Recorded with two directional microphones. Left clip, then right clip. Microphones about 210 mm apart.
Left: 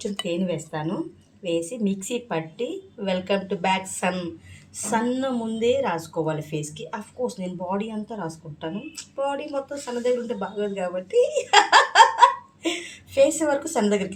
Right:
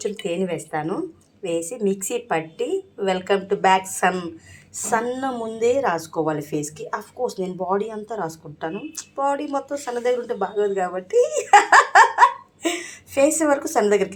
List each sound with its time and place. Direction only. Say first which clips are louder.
0.0 s a woman's voice: right 3 dB; 15° right (ahead or behind)